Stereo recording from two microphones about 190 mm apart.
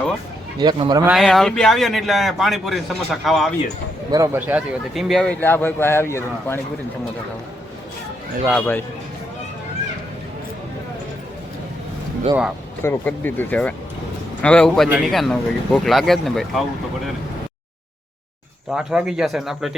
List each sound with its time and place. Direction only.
0.6 s speech: 25° right (ahead or behind)
1.0 s speech: centre (ahead or behind)
4.1 s speech: 15° right (ahead or behind); by 6.6 s 15° left (ahead or behind)
8.5 s speech: 10° left (ahead or behind)
12.8 s speech: 10° left (ahead or behind)
18.7 s speech: 5° right (ahead or behind)